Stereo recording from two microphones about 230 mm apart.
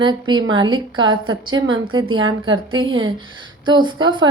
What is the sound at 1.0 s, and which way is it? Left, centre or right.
A woman's voice, right.